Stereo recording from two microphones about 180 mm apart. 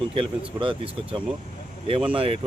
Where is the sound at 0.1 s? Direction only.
30° right (ahead or behind).